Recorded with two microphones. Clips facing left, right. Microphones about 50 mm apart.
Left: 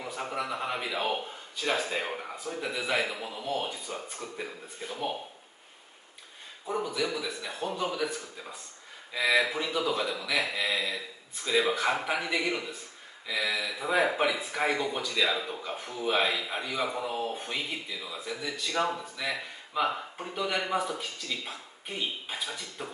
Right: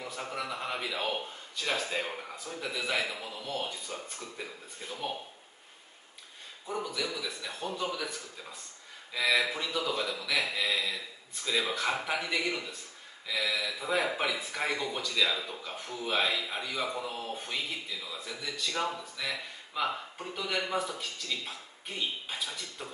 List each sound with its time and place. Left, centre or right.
0.0 s speech: centre
6.6 s speech: centre